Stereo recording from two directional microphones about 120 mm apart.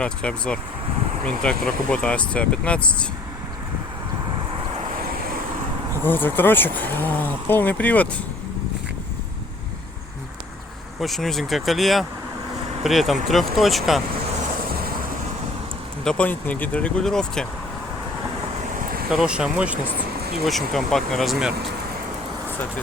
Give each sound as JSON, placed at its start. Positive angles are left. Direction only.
{"t": 0.0, "sound": "speech", "side_deg": 10}
{"t": 6.0, "sound": "speech", "side_deg": 15}
{"t": 11.0, "sound": "speech", "side_deg": 0}
{"t": 16.0, "sound": "speech", "side_deg": 10}
{"t": 19.1, "sound": "speech", "side_deg": -10}
{"t": 20.4, "sound": "speech", "side_deg": 0}